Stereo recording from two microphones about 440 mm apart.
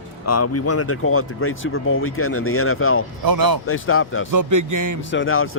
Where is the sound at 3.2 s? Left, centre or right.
Right.